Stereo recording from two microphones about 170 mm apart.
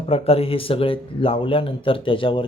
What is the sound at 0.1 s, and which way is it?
Speech, 35° left (ahead or behind).